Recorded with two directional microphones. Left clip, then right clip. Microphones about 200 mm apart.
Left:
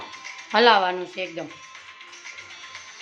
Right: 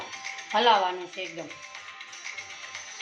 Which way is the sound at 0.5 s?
60° left (ahead or behind).